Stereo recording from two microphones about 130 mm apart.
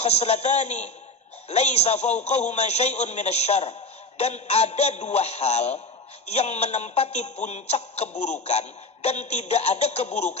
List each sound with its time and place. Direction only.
0.0 s a man's voice: 55° left (ahead or behind)